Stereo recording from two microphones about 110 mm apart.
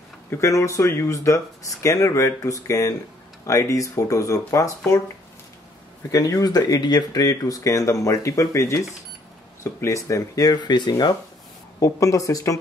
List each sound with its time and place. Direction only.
0.3 s speech: 25° left (ahead or behind)
6.1 s speech: 35° left (ahead or behind)